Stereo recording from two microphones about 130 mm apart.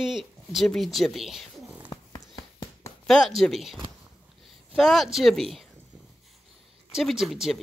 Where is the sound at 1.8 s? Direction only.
40° left (ahead or behind).